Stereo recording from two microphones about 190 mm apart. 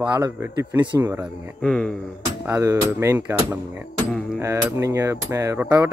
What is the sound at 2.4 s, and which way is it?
A man's voice, 15° right (ahead or behind).